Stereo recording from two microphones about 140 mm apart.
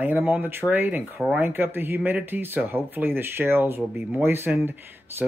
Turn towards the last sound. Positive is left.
turn(degrees=-15)  # may be behind; listen again after turning